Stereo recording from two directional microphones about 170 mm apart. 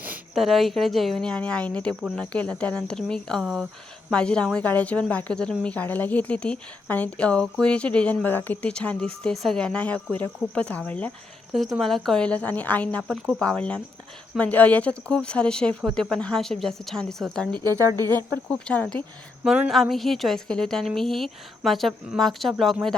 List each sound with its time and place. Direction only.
0.0 s a woman's voice: 5° right (ahead or behind)
13.0 s a woman's voice: 5° right (ahead or behind)
17.6 s speech: 20° right (ahead or behind)
18.6 s a woman's voice: 5° left (ahead or behind)
19.5 s a woman's voice: 5° right (ahead or behind)